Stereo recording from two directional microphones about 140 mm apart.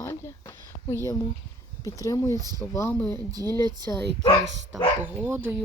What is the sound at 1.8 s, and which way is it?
Speech, 25° left (ahead or behind).